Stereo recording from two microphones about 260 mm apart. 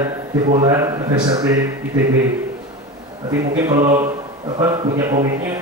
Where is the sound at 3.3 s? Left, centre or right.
Centre.